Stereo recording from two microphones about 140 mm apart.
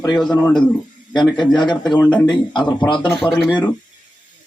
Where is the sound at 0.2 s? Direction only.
5° left (ahead or behind).